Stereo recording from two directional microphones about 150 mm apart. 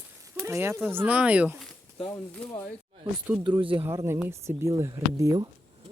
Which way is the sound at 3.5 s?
35° right (ahead or behind).